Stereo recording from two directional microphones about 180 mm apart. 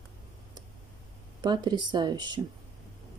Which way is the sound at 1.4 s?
25° right (ahead or behind).